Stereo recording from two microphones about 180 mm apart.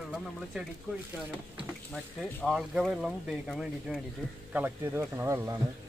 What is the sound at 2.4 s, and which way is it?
Speech, centre (ahead or behind).